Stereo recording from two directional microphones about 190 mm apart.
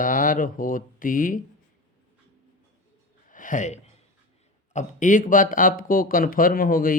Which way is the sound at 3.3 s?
45° left (ahead or behind).